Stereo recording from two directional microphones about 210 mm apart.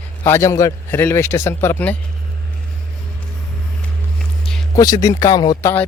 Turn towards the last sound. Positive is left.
turn(degrees=20)  # may be behind; listen again after turning